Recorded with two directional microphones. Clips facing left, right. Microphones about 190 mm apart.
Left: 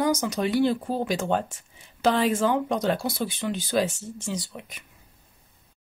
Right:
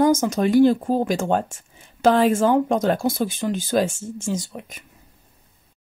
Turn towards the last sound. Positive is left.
turn(degrees=-45)  # may be behind; listen again after turning